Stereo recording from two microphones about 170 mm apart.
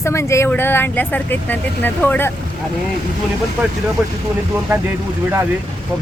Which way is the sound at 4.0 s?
Centre (ahead or behind).